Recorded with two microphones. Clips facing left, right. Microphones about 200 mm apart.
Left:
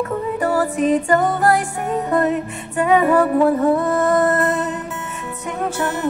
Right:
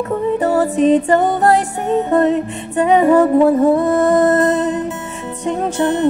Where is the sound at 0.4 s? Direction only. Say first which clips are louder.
Right 3 dB; 25° right (ahead or behind).